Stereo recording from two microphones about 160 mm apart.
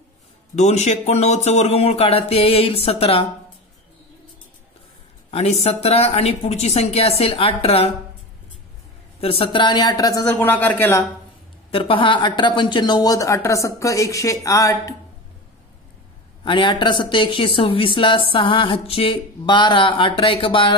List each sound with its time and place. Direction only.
0.6 s speech: 45° left (ahead or behind)
5.3 s speech: 40° left (ahead or behind)
9.2 s speech: 35° left (ahead or behind)
10.4 s speech: 10° left (ahead or behind)
11.7 s speech: 35° left (ahead or behind)
16.4 s speech: 30° left (ahead or behind)